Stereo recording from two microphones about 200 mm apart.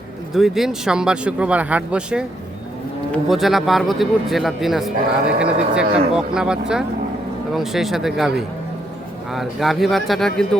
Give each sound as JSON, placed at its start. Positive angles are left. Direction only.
{"t": 0.3, "sound": "a man's voice", "side_deg": 0}